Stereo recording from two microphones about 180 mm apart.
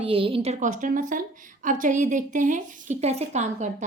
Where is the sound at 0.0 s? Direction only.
30° right (ahead or behind).